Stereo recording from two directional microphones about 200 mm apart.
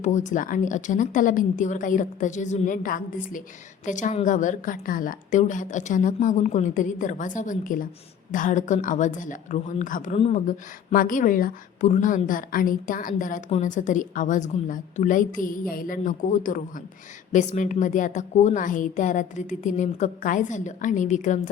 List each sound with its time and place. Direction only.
0.0 s a woman's voice: 35° left (ahead or behind)